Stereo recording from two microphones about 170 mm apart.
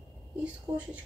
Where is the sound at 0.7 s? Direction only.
20° right (ahead or behind).